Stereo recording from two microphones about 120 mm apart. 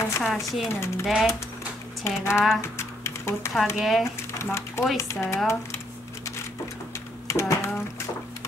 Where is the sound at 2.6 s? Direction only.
20° left (ahead or behind).